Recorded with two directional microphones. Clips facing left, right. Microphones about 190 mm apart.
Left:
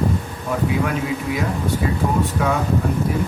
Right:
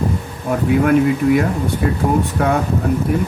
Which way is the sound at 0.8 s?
55° right (ahead or behind).